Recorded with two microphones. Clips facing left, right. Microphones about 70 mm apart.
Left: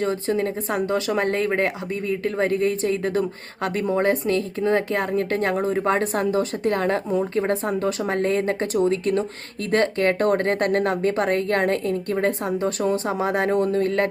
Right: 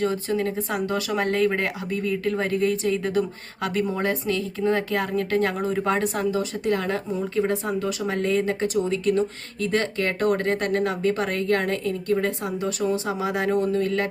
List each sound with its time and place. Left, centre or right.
0.0 s speech: left